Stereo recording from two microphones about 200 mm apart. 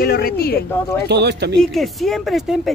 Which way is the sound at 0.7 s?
15° left (ahead or behind).